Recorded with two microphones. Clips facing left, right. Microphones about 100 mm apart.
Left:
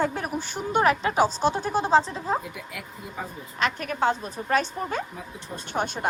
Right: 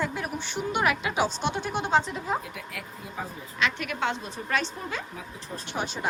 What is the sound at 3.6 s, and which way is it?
A woman's voice, 40° left (ahead or behind).